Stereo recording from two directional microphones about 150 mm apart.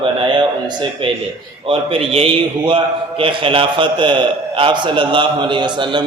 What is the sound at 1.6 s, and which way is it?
A man's voice, 40° right (ahead or behind).